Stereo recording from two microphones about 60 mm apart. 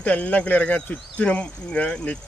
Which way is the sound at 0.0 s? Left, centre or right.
Left.